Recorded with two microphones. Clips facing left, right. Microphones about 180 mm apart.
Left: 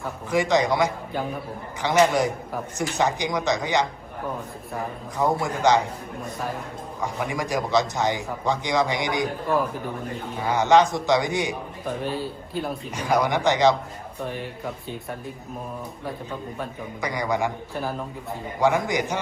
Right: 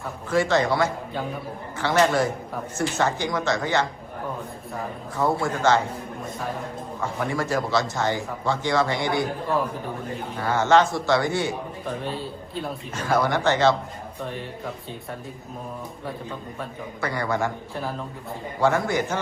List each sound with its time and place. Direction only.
0.3 s a man's voice: 15° left (ahead or behind)
5.1 s a man's voice: 15° left (ahead or behind)
7.0 s a man's voice: 15° left (ahead or behind)
10.3 s a man's voice: 15° left (ahead or behind)
13.0 s a man's voice: 15° left (ahead or behind)
17.0 s a man's voice: 15° left (ahead or behind)
18.6 s a man's voice: 15° left (ahead or behind)